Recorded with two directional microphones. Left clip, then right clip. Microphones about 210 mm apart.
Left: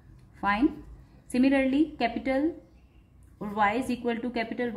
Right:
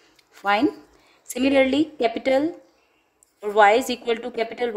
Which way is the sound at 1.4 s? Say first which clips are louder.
Right 6 dB; 55° right (ahead or behind).